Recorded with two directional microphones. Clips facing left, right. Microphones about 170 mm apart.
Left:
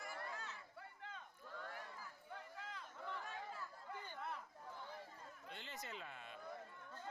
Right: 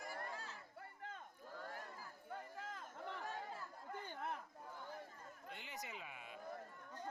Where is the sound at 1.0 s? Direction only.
45° right (ahead or behind).